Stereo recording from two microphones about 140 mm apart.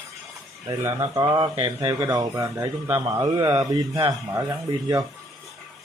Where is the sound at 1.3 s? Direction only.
40° right (ahead or behind).